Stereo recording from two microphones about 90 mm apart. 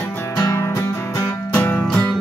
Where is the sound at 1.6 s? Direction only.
15° left (ahead or behind).